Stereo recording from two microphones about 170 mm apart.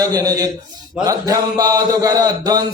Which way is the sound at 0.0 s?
20° right (ahead or behind).